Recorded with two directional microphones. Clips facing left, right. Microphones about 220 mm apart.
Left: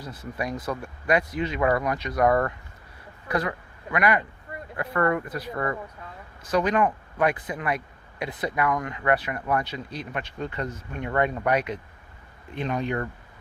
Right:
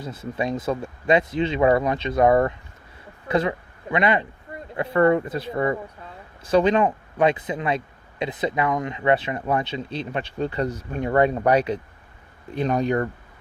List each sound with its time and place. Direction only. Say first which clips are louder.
0.0 s speech: right 5 dB; 25° right (ahead or behind); by 13.1 s 40° right (ahead or behind)